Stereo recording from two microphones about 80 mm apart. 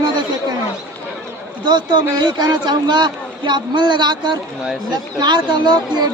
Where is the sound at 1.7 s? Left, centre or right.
Right.